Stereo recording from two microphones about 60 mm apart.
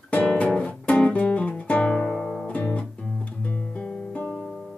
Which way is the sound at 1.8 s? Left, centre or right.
Centre.